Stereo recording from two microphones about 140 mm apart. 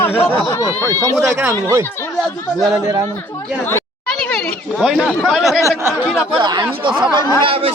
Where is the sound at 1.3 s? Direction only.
20° right (ahead or behind).